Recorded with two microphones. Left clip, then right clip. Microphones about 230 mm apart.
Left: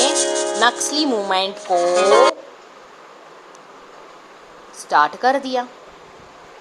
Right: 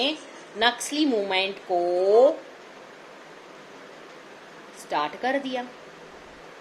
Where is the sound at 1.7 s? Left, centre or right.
Left.